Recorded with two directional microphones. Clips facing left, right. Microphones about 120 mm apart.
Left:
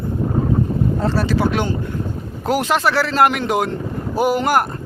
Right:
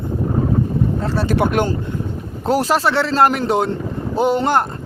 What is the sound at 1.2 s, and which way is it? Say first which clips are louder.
Speech: right 2 dB; 55° right (ahead or behind).